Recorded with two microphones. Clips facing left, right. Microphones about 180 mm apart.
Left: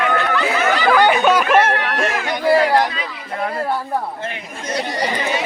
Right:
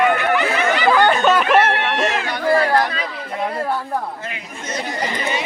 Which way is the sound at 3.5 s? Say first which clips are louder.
Left 2 dB; centre (ahead or behind).